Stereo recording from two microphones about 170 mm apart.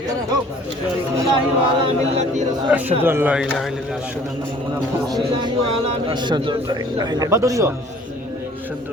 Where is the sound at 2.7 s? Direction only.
10° right (ahead or behind).